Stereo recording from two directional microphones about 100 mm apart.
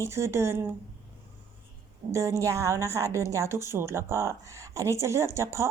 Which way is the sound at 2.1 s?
30° right (ahead or behind).